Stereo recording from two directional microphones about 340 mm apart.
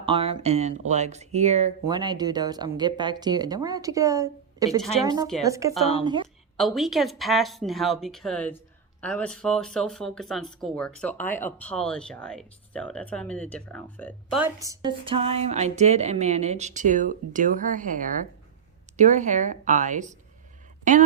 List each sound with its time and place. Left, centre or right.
0.0 s speech: centre
4.8 s speech: centre
5.5 s speech: centre